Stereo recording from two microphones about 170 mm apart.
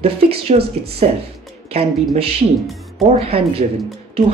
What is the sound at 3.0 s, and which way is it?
Speech, 35° right (ahead or behind).